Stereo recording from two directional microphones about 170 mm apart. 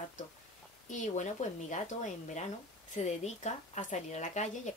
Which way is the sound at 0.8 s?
45° left (ahead or behind).